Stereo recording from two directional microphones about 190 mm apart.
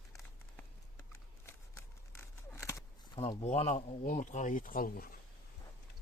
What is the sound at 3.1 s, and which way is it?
Speech, 30° left (ahead or behind).